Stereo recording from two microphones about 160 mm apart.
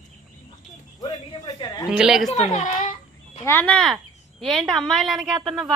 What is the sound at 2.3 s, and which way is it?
Speech, 45° left (ahead or behind).